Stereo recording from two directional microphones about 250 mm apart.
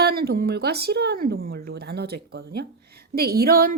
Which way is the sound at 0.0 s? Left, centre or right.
Right.